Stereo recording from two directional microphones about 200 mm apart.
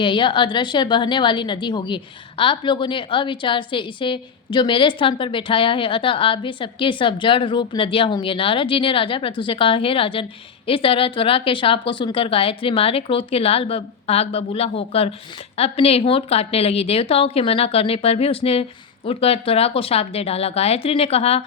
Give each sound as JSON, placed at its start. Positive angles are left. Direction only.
{"t": 0.0, "sound": "a woman's voice", "side_deg": 25}